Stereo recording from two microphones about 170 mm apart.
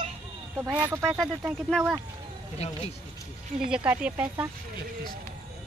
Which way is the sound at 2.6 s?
40° left (ahead or behind).